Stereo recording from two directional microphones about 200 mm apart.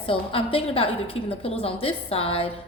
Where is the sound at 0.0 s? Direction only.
25° left (ahead or behind).